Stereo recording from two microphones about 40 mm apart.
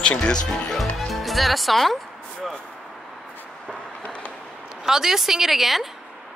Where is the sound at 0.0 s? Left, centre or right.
Left.